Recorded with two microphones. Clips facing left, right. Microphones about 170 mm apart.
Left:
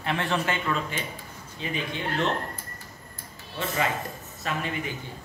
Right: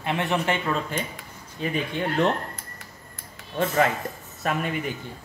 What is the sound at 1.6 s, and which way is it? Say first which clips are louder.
Speech: right 5 dB; 45° right (ahead or behind).